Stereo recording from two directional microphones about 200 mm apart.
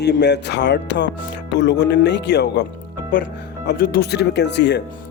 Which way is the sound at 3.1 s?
45° left (ahead or behind).